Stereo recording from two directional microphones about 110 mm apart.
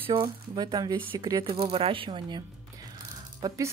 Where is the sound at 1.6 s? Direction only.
55° right (ahead or behind).